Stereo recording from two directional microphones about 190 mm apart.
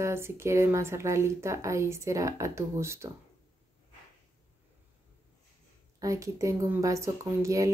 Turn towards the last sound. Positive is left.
turn(degrees=-15)  # may be behind; listen again after turning